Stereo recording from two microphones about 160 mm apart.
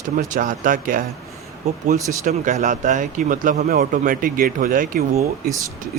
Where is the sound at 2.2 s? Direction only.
50° right (ahead or behind).